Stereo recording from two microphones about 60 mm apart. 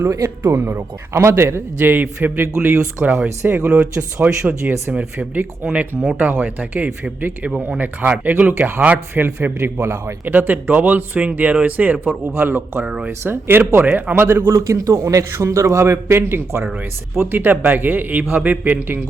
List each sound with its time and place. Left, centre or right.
0.4 s a man's voice: right
1.8 s a man's voice: right
2.7 s speech: centre
3.4 s a man's voice: right
4.2 s a man's voice: right
10.2 s speech: right
11.1 s speech: centre
11.6 s a man's voice: right
12.8 s speech: centre
13.1 s a man's voice: right
13.8 s a man's voice: right
14.5 s a man's voice: right